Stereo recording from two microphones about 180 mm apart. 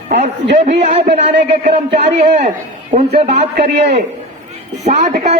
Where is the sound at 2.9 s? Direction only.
35° right (ahead or behind).